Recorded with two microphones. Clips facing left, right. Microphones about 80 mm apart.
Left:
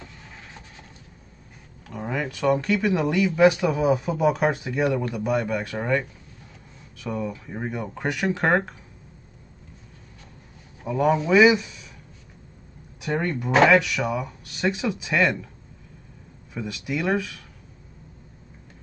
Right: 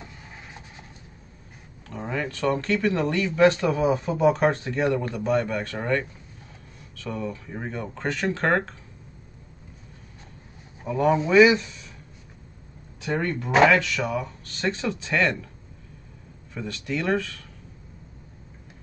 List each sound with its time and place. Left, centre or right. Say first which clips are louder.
0.0 s vehicle: even; centre
1.9 s speech: left 1 dB; centre
10.9 s speech: left 1 dB; centre
13.1 s speech: left 1 dB; centre
13.5 s speech: even; centre
13.7 s speech: left 3 dB; centre
16.5 s speech: left 1 dB; centre